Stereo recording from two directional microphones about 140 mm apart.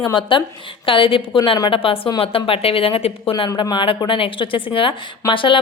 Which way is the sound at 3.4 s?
30° left (ahead or behind).